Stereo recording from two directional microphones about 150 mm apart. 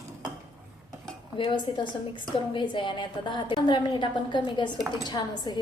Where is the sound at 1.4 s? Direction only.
30° left (ahead or behind).